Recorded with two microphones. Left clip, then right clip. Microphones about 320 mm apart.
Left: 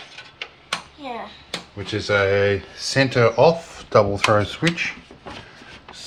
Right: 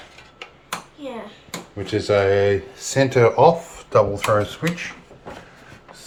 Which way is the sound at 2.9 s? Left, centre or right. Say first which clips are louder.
Right 1 dB; centre.